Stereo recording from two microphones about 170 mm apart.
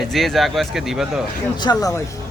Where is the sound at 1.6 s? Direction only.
20° left (ahead or behind).